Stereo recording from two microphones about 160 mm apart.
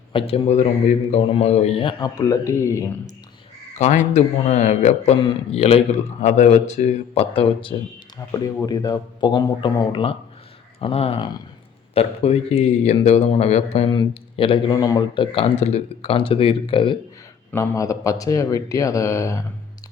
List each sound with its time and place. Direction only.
0.1 s a man's voice: 35° left (ahead or behind); by 2.8 s 20° left (ahead or behind)
3.8 s a man's voice: 45° left (ahead or behind)
8.3 s a man's voice: 25° left (ahead or behind)
17.5 s speech: 20° left (ahead or behind)